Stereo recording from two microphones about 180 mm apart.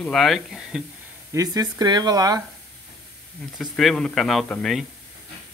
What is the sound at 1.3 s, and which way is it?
Speech, 20° right (ahead or behind).